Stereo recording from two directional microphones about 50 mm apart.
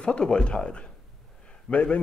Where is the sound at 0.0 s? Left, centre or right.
Centre.